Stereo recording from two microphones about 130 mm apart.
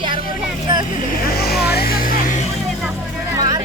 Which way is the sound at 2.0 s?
90° left.